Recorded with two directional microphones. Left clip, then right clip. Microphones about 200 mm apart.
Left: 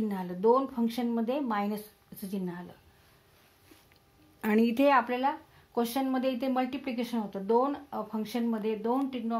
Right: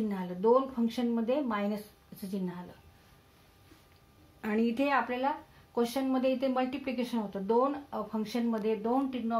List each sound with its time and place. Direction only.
0.1 s speech: 40° left (ahead or behind)
4.4 s speech: 50° left (ahead or behind)